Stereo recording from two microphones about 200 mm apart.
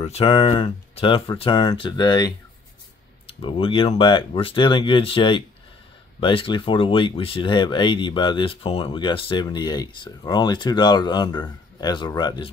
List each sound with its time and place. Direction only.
0.0 s speech: 30° left (ahead or behind)